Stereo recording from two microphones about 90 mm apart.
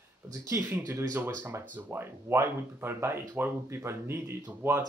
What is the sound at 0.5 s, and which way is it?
Speech, 30° right (ahead or behind).